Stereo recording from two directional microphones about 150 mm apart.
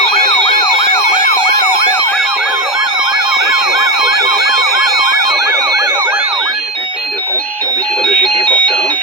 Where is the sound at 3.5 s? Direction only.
20° right (ahead or behind).